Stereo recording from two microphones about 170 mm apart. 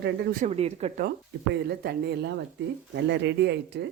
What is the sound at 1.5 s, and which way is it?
Speech, 70° right (ahead or behind).